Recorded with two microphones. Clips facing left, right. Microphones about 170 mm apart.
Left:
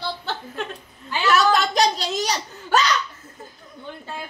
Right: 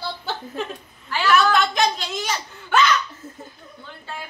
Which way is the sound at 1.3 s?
40° left (ahead or behind).